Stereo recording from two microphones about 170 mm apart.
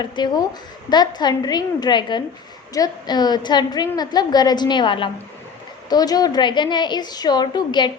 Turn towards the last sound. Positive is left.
turn(degrees=25)  # may be behind; listen again after turning